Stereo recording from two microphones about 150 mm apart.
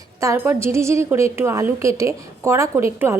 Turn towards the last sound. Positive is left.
turn(degrees=-15)  # may be behind; listen again after turning